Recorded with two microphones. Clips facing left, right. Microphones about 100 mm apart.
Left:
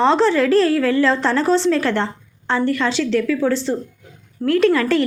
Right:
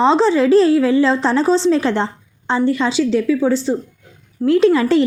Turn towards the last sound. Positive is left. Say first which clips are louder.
# right 3 dB
turn(degrees=-20)  # may be behind; listen again after turning